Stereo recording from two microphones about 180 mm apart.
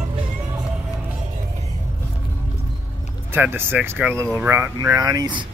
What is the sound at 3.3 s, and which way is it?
Speech, 10° right (ahead or behind).